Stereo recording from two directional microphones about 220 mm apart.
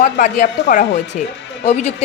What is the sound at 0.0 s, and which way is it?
A woman's voice, 35° left (ahead or behind).